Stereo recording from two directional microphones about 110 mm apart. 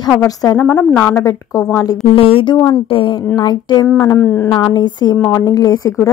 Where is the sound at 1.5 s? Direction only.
35° left (ahead or behind).